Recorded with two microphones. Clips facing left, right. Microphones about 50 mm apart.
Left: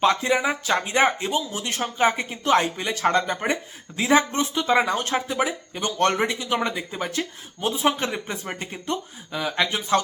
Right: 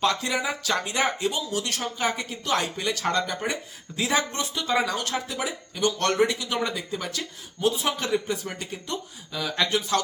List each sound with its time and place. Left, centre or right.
0.0 s speech: left